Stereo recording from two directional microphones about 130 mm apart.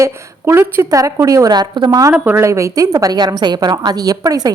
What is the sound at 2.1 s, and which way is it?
A woman's voice, 15° right (ahead or behind).